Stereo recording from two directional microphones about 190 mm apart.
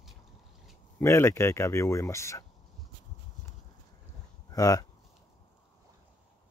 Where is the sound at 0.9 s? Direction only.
15° left (ahead or behind).